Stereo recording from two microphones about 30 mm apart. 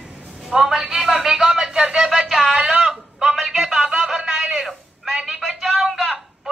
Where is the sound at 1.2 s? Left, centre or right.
Centre.